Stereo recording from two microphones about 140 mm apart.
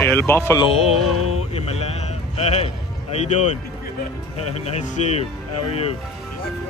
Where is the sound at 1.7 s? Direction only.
50° left (ahead or behind).